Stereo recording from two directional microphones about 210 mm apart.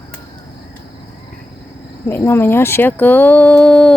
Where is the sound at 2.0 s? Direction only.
10° left (ahead or behind).